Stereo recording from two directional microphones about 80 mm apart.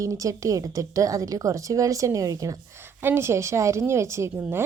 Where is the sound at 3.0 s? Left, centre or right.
Right.